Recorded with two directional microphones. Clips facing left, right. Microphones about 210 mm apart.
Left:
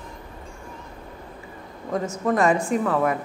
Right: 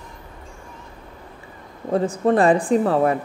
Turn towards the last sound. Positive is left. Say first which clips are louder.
# right 4 dB
turn(degrees=-30)  # may be behind; listen again after turning